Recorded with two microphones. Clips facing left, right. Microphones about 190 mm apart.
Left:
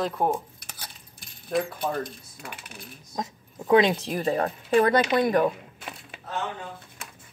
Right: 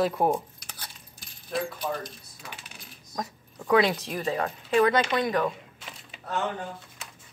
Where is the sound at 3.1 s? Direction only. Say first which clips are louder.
Left 2 dB; 25° left (ahead or behind).